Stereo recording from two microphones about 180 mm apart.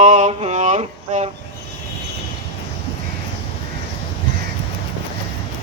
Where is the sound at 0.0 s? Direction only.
40° right (ahead or behind).